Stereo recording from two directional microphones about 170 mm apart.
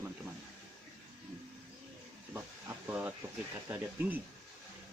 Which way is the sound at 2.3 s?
10° right (ahead or behind).